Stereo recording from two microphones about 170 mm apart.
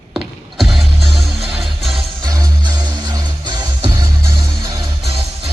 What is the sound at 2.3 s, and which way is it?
Music, 20° right (ahead or behind).